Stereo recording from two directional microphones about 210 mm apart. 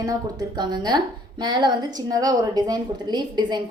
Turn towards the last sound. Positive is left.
turn(degrees=-20)  # may be behind; listen again after turning